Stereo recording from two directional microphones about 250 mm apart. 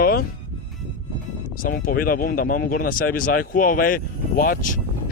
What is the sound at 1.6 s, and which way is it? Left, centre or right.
Speech, left.